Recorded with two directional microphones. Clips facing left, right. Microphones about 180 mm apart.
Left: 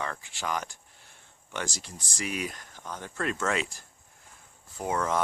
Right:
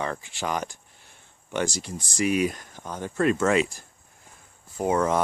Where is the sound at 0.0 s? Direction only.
20° right (ahead or behind).